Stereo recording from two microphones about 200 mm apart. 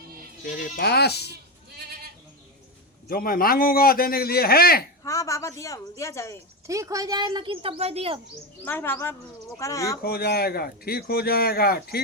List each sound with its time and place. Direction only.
0.4 s a man's voice: 50° left (ahead or behind)
3.1 s a man's voice: 45° left (ahead or behind)
5.0 s speech: 15° left (ahead or behind)
6.7 s speech: 15° right (ahead or behind)
8.6 s speech: 10° left (ahead or behind)
10.0 s a man's voice: 50° left (ahead or behind)